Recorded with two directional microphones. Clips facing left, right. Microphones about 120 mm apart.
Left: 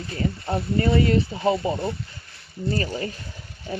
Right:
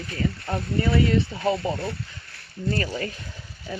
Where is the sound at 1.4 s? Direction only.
20° left (ahead or behind).